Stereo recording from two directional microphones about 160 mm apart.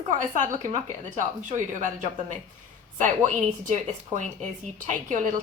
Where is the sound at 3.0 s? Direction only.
50° right (ahead or behind).